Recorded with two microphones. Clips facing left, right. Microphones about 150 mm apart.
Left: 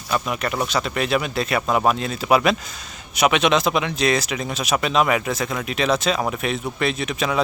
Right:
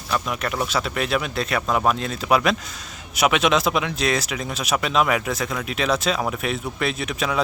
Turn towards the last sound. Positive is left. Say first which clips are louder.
# left 2 dB
turn(degrees=0)  # may be behind; listen again after turning